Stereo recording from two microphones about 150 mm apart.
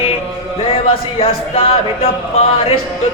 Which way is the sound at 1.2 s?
40° left (ahead or behind).